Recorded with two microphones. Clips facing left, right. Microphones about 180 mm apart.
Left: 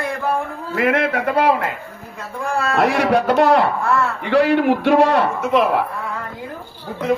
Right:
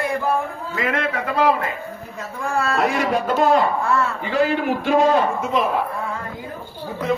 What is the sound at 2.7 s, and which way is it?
A man's voice, 70° left (ahead or behind).